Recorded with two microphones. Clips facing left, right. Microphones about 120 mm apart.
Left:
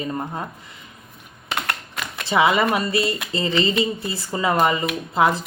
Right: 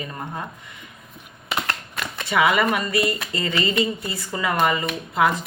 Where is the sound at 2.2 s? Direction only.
30° left (ahead or behind).